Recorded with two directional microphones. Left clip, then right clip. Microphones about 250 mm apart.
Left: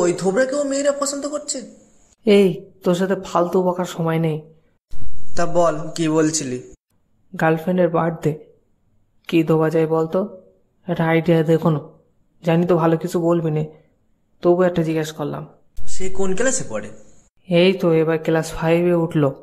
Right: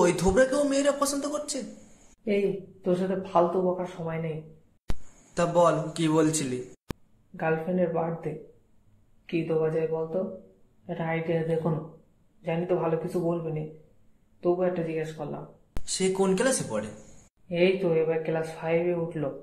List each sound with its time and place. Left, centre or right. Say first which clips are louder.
0.0 s a man's voice: left 4 dB; centre
2.2 s speech: left 12 dB; left
5.3 s a man's voice: left 4 dB; centre
7.3 s speech: left 9 dB; left
15.9 s speech: left 1 dB; centre
17.5 s speech: left 8 dB; left